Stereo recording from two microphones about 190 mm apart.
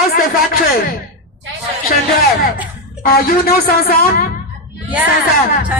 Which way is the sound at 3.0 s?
50° left (ahead or behind).